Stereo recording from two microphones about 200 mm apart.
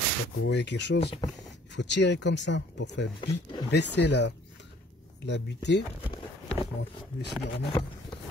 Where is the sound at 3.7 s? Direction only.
60° left (ahead or behind).